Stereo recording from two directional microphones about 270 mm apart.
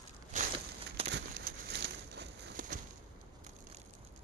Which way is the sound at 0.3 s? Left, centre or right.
Right.